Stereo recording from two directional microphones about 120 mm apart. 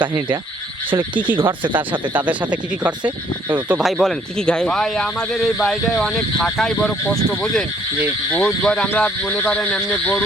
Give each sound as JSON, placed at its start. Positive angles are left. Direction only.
{"t": 0.9, "sound": "speech", "side_deg": -45}
{"t": 1.7, "sound": "speech", "side_deg": -15}